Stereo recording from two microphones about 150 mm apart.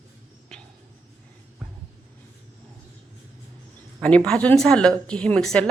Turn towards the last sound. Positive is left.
turn(degrees=5)  # may be behind; listen again after turning